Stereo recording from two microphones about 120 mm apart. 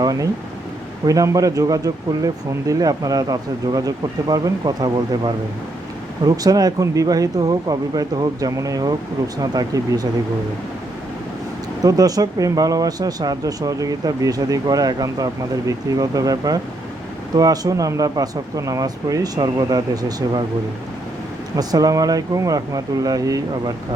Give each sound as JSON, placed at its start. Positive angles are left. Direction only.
{"t": 0.0, "sound": "a sound", "side_deg": -30}
{"t": 1.0, "sound": "speech", "side_deg": -30}
{"t": 11.8, "sound": "speech", "side_deg": -30}
{"t": 21.5, "sound": "speech", "side_deg": -30}